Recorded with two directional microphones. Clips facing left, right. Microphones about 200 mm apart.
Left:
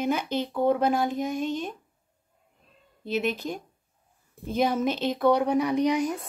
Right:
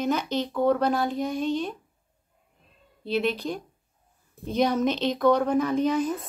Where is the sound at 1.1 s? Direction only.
45° left (ahead or behind).